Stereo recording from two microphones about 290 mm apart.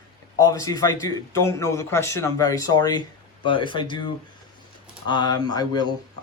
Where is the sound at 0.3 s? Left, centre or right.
Centre.